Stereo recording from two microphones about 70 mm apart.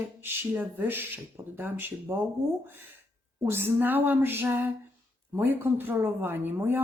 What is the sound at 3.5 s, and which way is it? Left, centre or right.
A woman's voice, right.